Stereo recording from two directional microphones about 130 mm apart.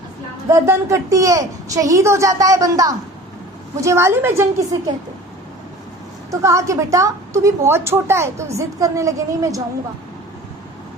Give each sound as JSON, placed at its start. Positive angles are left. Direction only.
{"t": 0.5, "sound": "a woman's voice", "side_deg": -20}
{"t": 6.3, "sound": "a woman's voice", "side_deg": -25}